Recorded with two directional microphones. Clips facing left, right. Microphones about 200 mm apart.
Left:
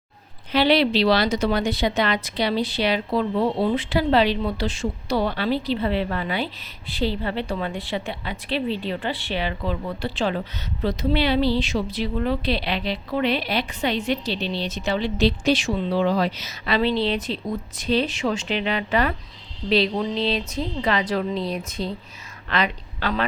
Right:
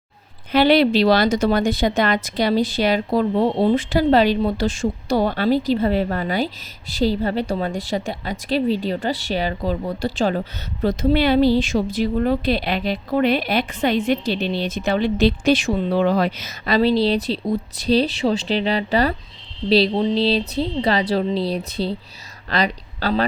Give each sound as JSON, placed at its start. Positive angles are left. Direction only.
{"t": 0.5, "sound": "a woman's voice", "side_deg": -50}